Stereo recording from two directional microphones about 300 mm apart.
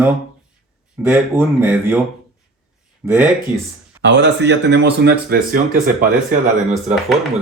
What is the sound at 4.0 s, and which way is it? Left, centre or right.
Speech, right.